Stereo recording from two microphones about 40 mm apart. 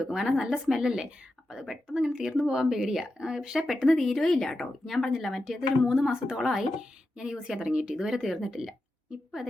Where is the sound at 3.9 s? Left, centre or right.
Centre.